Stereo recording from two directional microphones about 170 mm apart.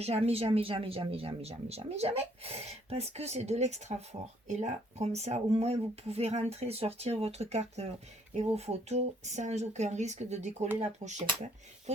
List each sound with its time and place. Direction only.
0.0 s speech: 35° right (ahead or behind)